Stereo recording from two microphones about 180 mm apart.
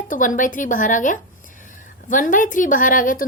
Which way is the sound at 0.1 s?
45° left (ahead or behind).